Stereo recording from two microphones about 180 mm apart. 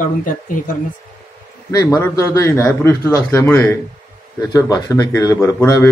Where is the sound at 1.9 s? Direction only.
15° left (ahead or behind).